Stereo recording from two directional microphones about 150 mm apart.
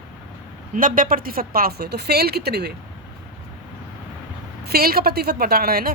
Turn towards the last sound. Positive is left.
turn(degrees=-85)